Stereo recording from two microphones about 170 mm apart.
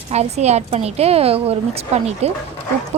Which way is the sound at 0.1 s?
40° right (ahead or behind).